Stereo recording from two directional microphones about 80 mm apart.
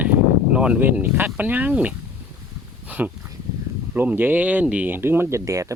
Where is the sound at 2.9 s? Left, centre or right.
Centre.